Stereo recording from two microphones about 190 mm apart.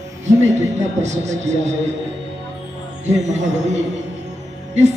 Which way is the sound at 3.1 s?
35° right (ahead or behind).